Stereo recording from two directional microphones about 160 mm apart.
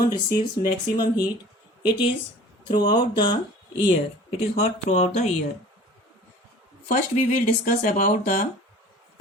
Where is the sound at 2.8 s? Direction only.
30° left (ahead or behind).